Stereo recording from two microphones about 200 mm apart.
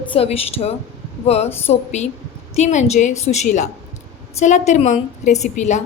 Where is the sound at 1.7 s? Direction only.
35° left (ahead or behind).